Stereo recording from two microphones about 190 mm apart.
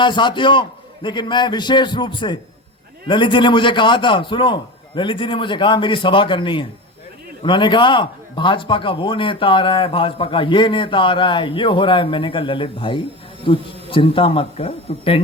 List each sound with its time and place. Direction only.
0.0 s a man's voice: 25° left (ahead or behind)